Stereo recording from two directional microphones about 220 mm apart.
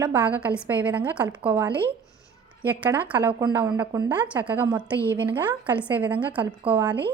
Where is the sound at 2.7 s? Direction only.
5° right (ahead or behind).